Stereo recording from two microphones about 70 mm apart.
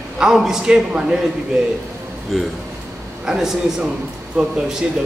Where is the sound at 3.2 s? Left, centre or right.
Centre.